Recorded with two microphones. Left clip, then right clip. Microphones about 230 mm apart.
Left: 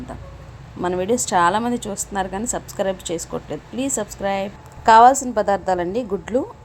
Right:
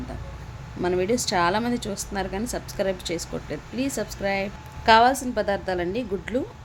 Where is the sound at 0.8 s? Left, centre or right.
Centre.